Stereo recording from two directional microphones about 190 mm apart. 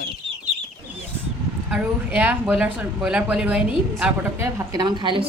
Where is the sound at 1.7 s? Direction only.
5° right (ahead or behind); by 5.3 s 25° right (ahead or behind).